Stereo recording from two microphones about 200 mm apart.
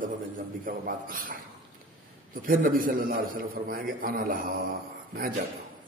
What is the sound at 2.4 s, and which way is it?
A man's voice, 45° right (ahead or behind).